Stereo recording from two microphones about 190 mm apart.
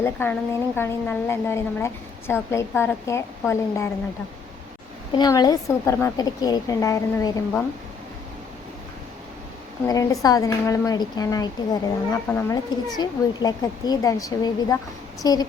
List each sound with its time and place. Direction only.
0.0 s a woman's voice: 10° left (ahead or behind)
5.1 s speech: 20° left (ahead or behind)
9.8 s speech: 15° left (ahead or behind)